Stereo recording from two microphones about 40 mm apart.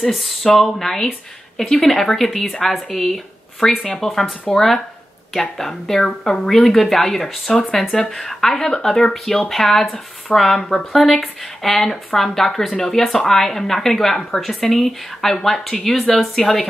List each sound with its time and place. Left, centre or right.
0.0 s speech: centre